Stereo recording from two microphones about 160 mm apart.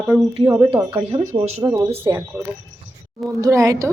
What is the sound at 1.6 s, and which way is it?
Speech, 15° right (ahead or behind).